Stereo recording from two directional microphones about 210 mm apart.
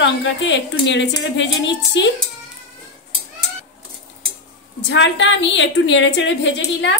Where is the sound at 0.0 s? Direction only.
60° left (ahead or behind).